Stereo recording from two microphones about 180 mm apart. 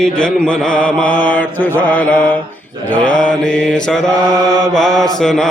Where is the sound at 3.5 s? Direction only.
5° left (ahead or behind).